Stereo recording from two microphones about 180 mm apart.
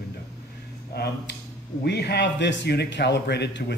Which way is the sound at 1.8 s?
65° left (ahead or behind).